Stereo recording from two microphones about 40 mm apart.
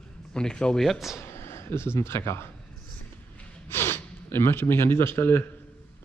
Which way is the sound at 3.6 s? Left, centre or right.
Left.